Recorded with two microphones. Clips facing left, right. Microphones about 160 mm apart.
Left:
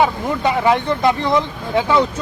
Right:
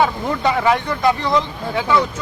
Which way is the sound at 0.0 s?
15° left (ahead or behind).